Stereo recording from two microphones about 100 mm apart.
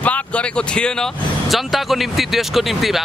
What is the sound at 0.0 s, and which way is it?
Vehicle, 15° left (ahead or behind).